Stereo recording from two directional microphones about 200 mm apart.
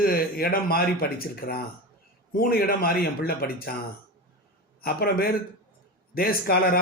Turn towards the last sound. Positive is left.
turn(degrees=50)  # may be behind; listen again after turning